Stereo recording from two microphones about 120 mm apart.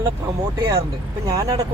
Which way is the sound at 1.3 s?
25° right (ahead or behind).